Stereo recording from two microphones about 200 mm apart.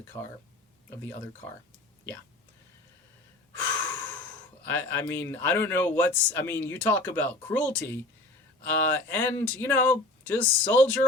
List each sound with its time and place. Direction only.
0.1 s speech: 20° left (ahead or behind)
4.6 s speech: 10° left (ahead or behind)